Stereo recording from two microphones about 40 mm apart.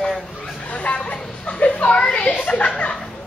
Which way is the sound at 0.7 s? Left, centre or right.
Left.